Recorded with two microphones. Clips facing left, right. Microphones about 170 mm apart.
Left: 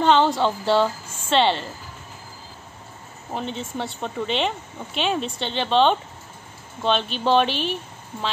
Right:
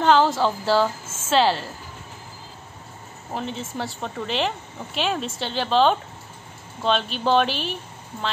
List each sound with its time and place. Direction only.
0.0 s speech: centre (ahead or behind)
3.3 s speech: centre (ahead or behind)